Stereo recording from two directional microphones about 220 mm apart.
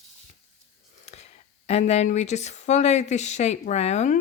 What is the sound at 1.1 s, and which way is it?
Speech, 30° left (ahead or behind).